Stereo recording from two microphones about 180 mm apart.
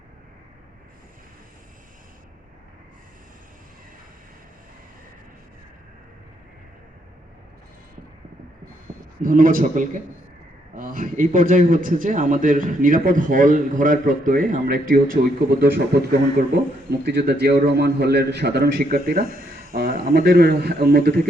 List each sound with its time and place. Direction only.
9.2 s a man's voice: 50° right (ahead or behind)
17.2 s a man's voice: 65° right (ahead or behind)